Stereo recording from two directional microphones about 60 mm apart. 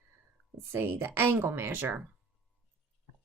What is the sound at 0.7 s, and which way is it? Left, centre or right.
Speech, right.